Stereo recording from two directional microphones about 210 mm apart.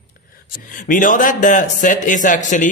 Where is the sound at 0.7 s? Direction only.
40° left (ahead or behind).